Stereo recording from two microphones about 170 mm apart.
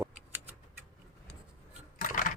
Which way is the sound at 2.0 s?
50° left (ahead or behind).